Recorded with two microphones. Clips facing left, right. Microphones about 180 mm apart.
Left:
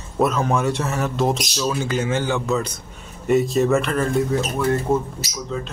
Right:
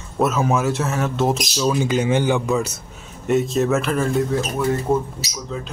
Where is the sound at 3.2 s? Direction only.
Centre (ahead or behind).